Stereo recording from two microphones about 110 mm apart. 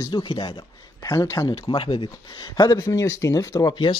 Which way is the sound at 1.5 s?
55° left (ahead or behind).